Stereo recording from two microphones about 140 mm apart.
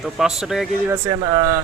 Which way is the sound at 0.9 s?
25° right (ahead or behind).